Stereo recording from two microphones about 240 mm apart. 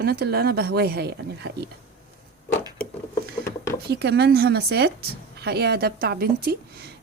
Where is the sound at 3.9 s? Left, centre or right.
Right.